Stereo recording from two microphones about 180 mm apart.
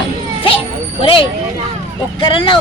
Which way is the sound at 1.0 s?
30° left (ahead or behind).